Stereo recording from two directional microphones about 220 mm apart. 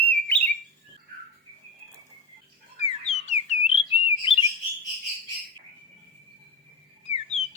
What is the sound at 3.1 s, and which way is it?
Alarm, 30° left (ahead or behind).